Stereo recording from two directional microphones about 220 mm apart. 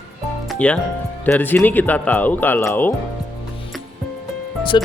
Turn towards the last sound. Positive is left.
turn(degrees=20)  # may be behind; listen again after turning